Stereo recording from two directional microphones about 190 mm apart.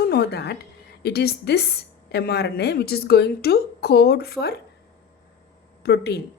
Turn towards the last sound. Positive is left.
turn(degrees=60)  # may be behind; listen again after turning